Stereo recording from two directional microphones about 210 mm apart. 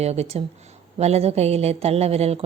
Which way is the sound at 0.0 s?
30° right (ahead or behind).